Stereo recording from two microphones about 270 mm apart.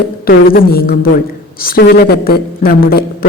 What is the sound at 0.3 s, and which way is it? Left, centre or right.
Speech, left.